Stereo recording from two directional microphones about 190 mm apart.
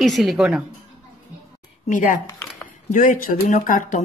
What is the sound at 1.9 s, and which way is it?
A woman's voice, 40° left (ahead or behind).